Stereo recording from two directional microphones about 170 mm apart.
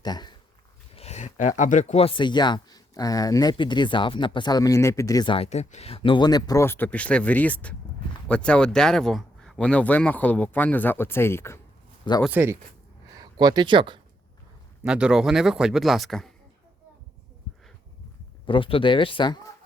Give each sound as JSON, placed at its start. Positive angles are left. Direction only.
{"t": 0.0, "sound": "speech", "side_deg": 25}
{"t": 0.9, "sound": "speech", "side_deg": 40}
{"t": 5.5, "sound": "speech", "side_deg": 40}
{"t": 12.2, "sound": "speech", "side_deg": -10}
{"t": 13.3, "sound": "speech", "side_deg": -25}
{"t": 14.8, "sound": "a man's voice", "side_deg": -5}
{"t": 17.5, "sound": "a sound", "side_deg": 0}
{"t": 18.4, "sound": "speech", "side_deg": 30}